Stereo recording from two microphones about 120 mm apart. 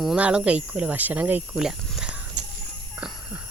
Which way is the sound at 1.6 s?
5° right (ahead or behind).